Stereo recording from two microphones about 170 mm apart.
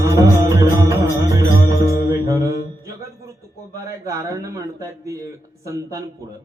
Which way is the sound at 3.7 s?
20° right (ahead or behind).